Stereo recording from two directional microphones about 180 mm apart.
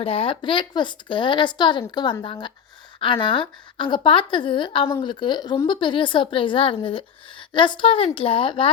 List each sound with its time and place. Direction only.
0.0 s a woman's voice: 30° left (ahead or behind)